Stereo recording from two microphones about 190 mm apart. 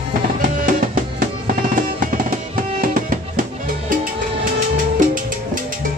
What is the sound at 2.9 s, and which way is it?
Music, 45° right (ahead or behind).